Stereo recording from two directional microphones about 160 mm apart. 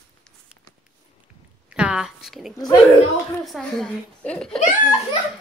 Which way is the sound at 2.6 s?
25° left (ahead or behind).